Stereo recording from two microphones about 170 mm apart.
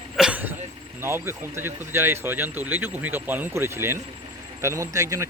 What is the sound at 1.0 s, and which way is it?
Speech, 15° right (ahead or behind).